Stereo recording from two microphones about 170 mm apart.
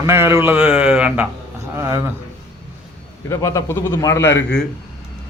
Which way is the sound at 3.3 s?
15° left (ahead or behind).